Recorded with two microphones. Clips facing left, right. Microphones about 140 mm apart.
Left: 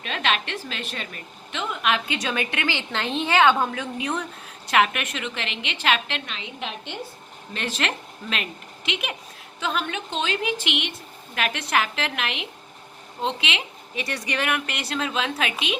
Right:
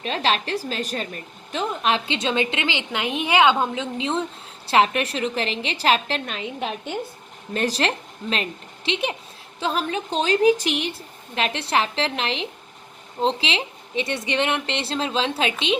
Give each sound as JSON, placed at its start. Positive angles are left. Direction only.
{"t": 0.0, "sound": "a woman's voice", "side_deg": -35}